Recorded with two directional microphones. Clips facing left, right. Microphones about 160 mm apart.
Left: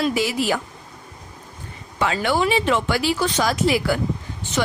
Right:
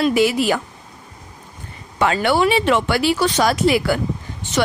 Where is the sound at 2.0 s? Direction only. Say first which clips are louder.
Right 4 dB; 65° right (ahead or behind).